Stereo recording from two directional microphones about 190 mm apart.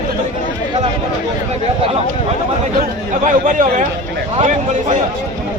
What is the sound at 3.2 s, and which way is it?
A man's voice, 45° right (ahead or behind).